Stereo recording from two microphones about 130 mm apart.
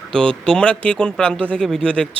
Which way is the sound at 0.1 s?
5° left (ahead or behind).